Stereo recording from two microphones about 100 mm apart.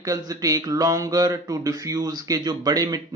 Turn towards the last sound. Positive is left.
turn(degrees=-40)  # may be behind; listen again after turning